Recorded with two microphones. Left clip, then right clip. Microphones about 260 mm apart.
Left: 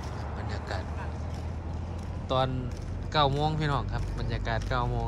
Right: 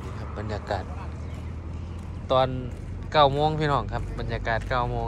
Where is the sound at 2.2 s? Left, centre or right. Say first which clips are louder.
Right 6 dB; centre.